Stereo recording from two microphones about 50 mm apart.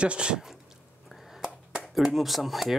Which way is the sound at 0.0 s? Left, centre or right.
Right.